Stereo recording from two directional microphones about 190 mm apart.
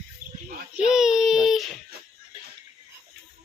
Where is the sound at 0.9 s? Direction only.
Centre (ahead or behind).